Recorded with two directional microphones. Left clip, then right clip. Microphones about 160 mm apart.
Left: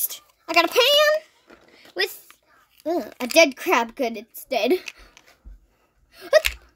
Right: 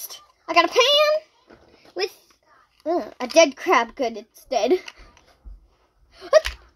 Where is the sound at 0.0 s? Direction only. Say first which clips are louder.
Left 1 dB; 25° left (ahead or behind).